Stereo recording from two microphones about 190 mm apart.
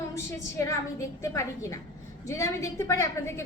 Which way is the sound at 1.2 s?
15° left (ahead or behind).